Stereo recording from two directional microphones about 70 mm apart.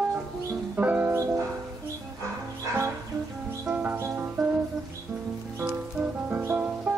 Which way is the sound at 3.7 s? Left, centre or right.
Right.